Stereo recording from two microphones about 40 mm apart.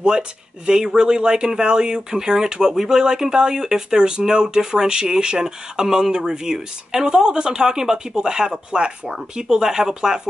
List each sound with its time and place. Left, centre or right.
0.7 s speech: centre